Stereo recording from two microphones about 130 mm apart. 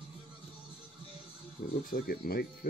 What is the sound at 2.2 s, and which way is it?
Speech, 90° left.